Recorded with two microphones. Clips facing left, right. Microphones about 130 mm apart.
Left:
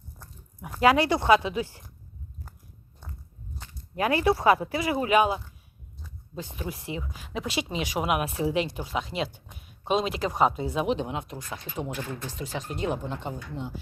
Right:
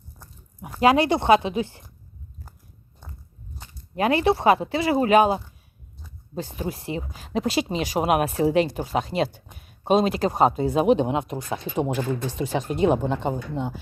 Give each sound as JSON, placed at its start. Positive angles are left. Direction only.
{"t": 0.8, "sound": "speech", "side_deg": -20}
{"t": 3.9, "sound": "speech", "side_deg": -25}